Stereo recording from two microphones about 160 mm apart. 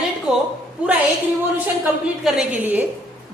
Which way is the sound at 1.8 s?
Centre (ahead or behind).